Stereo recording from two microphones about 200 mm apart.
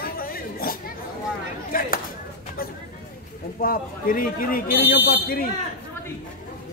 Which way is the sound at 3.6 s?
45° left (ahead or behind).